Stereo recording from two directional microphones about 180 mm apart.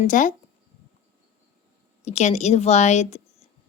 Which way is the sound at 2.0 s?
40° left (ahead or behind).